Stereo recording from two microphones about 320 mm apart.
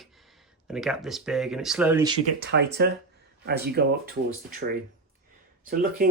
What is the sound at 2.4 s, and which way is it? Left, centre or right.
Speech, right.